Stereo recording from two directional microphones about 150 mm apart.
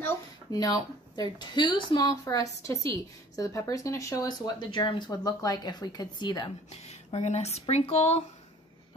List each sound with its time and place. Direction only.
0.5 s speech: 25° left (ahead or behind)
6.9 s speech: 45° left (ahead or behind)